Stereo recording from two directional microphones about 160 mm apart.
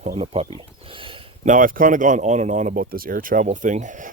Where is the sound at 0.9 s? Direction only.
35° right (ahead or behind).